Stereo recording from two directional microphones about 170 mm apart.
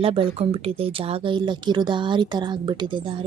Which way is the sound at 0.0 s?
35° right (ahead or behind).